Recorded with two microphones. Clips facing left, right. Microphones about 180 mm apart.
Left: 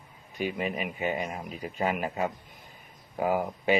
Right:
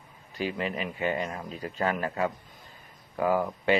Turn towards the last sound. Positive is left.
turn(degrees=15)  # may be behind; listen again after turning